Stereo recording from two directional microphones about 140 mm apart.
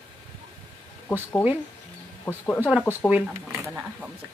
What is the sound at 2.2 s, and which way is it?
Speech, 10° left (ahead or behind).